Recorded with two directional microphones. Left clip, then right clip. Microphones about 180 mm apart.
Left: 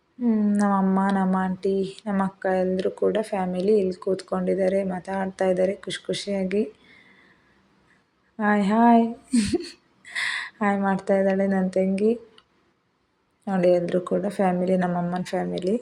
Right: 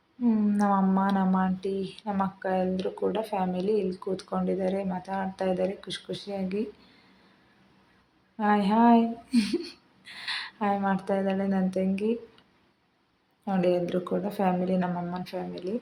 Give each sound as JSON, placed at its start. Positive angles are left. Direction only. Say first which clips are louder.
{"t": 0.3, "sound": "speech", "louder": "left 2 dB", "side_deg": 20}
{"t": 8.4, "sound": "speech", "louder": "left 2 dB", "side_deg": 20}